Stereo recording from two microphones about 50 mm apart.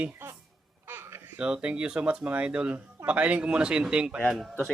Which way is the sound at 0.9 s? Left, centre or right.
Right.